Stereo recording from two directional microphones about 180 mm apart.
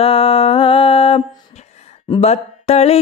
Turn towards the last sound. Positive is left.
turn(degrees=35)  # may be behind; listen again after turning